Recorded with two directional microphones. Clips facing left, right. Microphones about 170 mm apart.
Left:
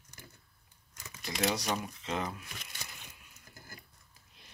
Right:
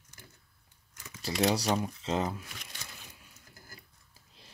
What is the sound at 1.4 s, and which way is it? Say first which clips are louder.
Speech: right 5 dB; 30° right (ahead or behind).